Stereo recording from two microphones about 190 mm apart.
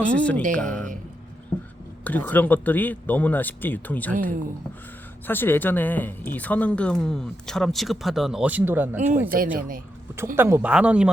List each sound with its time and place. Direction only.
0.0 s speech: 5° left (ahead or behind)
2.0 s speech: 10° left (ahead or behind)
5.2 s speech: 10° left (ahead or behind); by 9.3 s 10° right (ahead or behind)
9.6 s speech: 45° right (ahead or behind)
10.3 s speech: 10° right (ahead or behind)